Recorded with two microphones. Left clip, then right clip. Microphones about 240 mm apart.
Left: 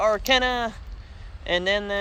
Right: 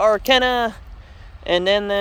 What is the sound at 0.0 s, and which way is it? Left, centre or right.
Speech, right.